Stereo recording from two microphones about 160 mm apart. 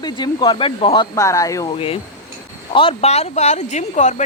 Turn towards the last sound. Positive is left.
turn(degrees=50)  # may be behind; listen again after turning